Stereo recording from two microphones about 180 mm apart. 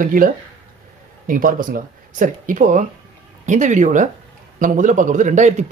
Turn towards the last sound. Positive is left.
turn(degrees=-40)  # may be behind; listen again after turning